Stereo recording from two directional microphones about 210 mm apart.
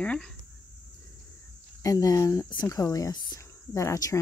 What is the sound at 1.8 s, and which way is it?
Speech, 15° left (ahead or behind).